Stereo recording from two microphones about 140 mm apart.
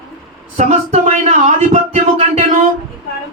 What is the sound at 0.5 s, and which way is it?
Speech, 55° right (ahead or behind).